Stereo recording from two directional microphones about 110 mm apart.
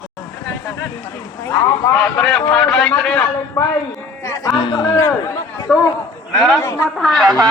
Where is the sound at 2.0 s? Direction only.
5° left (ahead or behind).